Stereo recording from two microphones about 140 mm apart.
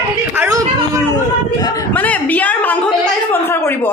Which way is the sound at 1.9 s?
10° left (ahead or behind).